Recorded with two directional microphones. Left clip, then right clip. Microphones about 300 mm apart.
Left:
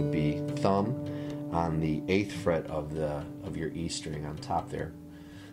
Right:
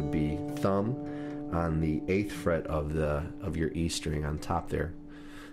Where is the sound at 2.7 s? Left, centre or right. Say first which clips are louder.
Right 2 dB; right.